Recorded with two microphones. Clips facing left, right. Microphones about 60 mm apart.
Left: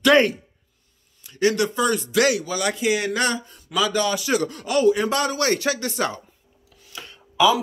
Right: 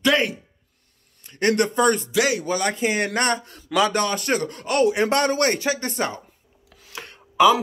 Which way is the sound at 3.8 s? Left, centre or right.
Right.